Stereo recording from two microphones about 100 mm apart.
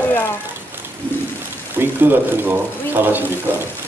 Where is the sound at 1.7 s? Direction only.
20° right (ahead or behind).